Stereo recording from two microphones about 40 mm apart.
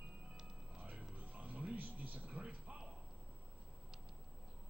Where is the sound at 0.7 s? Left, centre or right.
Right.